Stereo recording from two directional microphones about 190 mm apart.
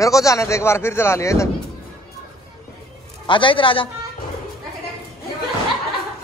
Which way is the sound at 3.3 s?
25° left (ahead or behind).